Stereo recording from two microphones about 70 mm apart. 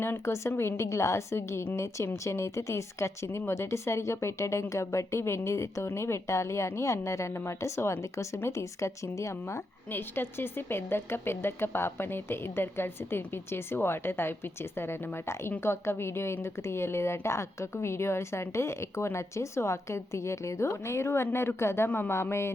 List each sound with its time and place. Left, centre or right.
0.0 s speech: left